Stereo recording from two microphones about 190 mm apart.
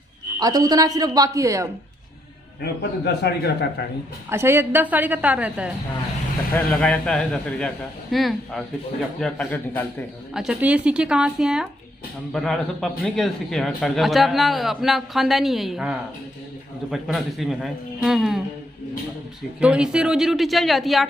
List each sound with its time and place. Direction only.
0.4 s speech: 20° right (ahead or behind)
2.6 s a man's voice: 60° left (ahead or behind)
4.3 s a woman's voice: 15° right (ahead or behind)
6.5 s a man's voice: 5° left (ahead or behind)
10.3 s a man's voice: 5° right (ahead or behind)
19.6 s a man's voice: 5° right (ahead or behind)